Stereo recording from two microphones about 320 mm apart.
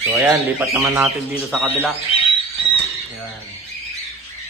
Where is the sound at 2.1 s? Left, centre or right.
Centre.